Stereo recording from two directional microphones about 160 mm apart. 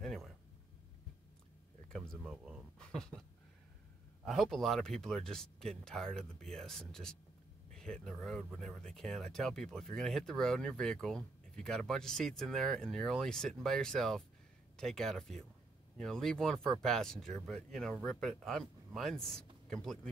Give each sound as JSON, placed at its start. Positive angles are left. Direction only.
{"t": 0.0, "sound": "a sound", "side_deg": 0}
{"t": 1.9, "sound": "speech", "side_deg": 5}
{"t": 4.2, "sound": "speech", "side_deg": 0}